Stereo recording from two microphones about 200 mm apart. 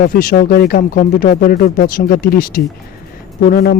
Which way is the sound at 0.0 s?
45° left (ahead or behind).